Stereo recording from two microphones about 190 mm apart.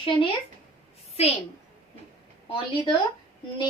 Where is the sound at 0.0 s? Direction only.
25° left (ahead or behind).